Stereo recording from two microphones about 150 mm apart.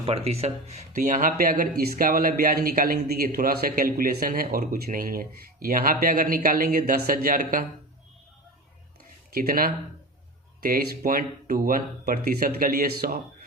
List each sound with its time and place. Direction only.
0.0 s speech: 40° right (ahead or behind)
0.9 s speech: 65° right (ahead or behind)
9.3 s speech: 75° right (ahead or behind); by 13.1 s 90° right